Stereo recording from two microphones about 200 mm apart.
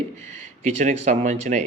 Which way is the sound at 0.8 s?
35° right (ahead or behind).